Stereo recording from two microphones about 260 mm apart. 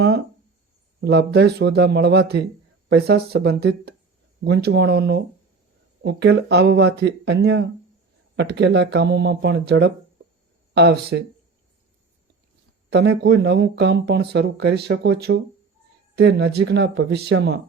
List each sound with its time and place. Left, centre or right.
1.0 s speech: right
12.9 s speech: right